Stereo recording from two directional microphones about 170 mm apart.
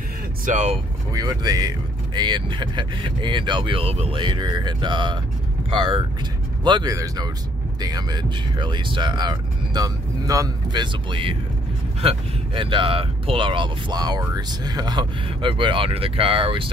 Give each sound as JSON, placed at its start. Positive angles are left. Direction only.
{"t": 0.5, "sound": "speech", "side_deg": -40}
{"t": 1.1, "sound": "speech", "side_deg": -25}